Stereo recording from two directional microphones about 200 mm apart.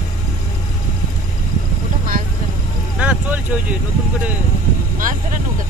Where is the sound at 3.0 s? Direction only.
5° right (ahead or behind).